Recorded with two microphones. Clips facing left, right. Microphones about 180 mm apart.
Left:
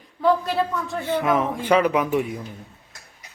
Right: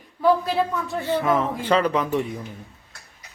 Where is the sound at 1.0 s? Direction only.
15° left (ahead or behind).